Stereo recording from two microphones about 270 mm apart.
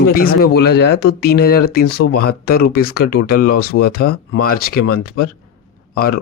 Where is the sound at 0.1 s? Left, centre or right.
Left.